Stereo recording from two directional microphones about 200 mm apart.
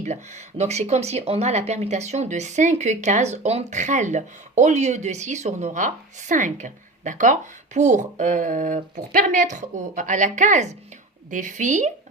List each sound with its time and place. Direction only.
0.0 s speech: 35° right (ahead or behind)